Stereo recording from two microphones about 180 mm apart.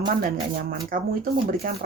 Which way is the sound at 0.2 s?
55° right (ahead or behind).